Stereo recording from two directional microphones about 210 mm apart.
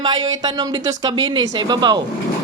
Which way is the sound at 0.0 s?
20° right (ahead or behind).